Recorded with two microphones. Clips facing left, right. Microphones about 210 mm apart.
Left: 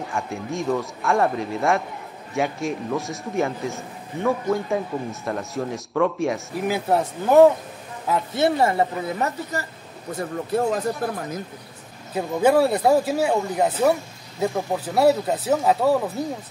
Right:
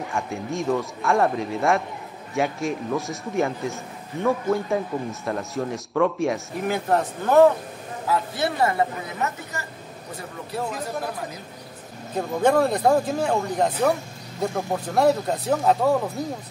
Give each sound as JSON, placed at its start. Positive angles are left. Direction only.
{"t": 0.1, "sound": "speech", "side_deg": 0}
{"t": 8.1, "sound": "speech", "side_deg": 25}
{"t": 12.2, "sound": "speech", "side_deg": 5}